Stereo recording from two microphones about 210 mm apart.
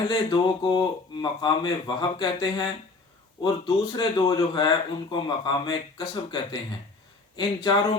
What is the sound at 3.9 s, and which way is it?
Speech, 20° left (ahead or behind).